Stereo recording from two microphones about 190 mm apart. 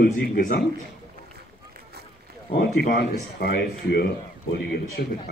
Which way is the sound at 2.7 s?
55° left (ahead or behind).